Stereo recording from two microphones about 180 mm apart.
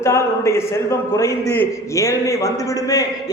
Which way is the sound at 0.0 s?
15° left (ahead or behind).